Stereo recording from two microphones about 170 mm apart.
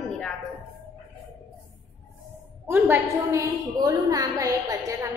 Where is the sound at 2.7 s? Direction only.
15° right (ahead or behind).